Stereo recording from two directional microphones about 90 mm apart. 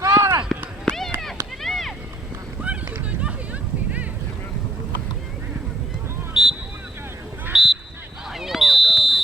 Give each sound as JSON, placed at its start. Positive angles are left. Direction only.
{"t": 0.1, "sound": "run", "side_deg": -30}
{"t": 0.9, "sound": "run", "side_deg": 5}
{"t": 1.6, "sound": "a sound", "side_deg": 0}
{"t": 2.6, "sound": "run", "side_deg": -15}
{"t": 6.3, "sound": "a sound", "side_deg": -10}
{"t": 8.3, "sound": "basketball bounce", "side_deg": -5}